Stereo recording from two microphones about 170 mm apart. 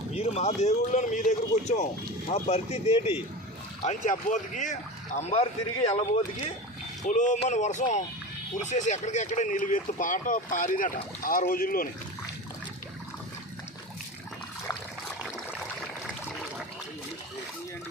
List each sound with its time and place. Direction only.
0.1 s speech: 40° left (ahead or behind); by 11.9 s 60° left (ahead or behind)
15.0 s stream: centre (ahead or behind)